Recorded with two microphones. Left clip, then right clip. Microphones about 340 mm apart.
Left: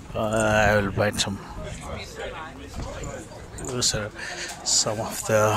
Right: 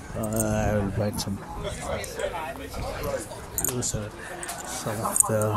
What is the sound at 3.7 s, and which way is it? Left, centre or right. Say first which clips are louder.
Speech: left 6 dB; left.